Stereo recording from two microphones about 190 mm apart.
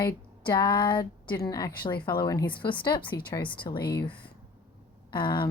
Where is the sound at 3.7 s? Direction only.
55° left (ahead or behind).